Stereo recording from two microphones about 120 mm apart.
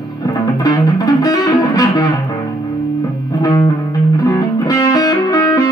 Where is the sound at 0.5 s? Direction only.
30° left (ahead or behind).